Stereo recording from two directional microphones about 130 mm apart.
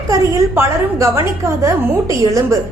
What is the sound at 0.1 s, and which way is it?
A woman's voice, 20° right (ahead or behind).